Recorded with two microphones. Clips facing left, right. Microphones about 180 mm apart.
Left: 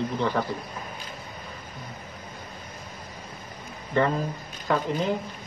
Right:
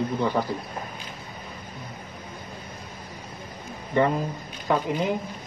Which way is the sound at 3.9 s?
15° right (ahead or behind).